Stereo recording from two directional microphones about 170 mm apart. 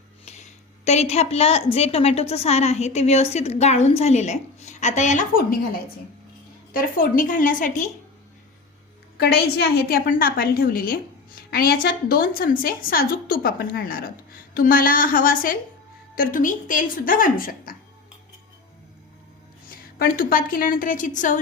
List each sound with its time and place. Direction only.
0.9 s a woman's voice: 40° left (ahead or behind)
7.0 s a woman's voice: 55° left (ahead or behind)
9.1 s a woman's voice: 70° left (ahead or behind)
19.6 s a woman's voice: 60° left (ahead or behind)